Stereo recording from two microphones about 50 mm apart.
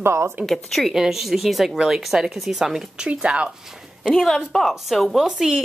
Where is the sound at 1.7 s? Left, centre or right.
Centre.